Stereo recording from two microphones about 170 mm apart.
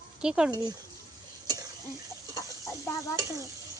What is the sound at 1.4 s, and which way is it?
Stir, 20° right (ahead or behind).